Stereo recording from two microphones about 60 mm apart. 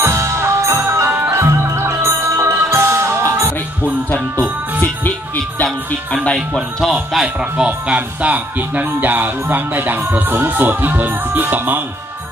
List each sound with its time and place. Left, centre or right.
0.0 s music: right
6.1 s speech: centre
7.5 s speech: centre; by 11.8 s right